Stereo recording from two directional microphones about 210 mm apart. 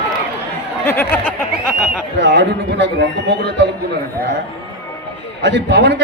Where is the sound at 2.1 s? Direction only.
55° right (ahead or behind).